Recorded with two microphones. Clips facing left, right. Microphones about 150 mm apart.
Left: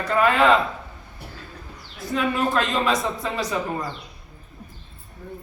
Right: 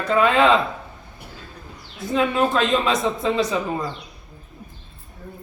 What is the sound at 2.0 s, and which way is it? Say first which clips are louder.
A man's voice: right 4 dB; 25° right (ahead or behind).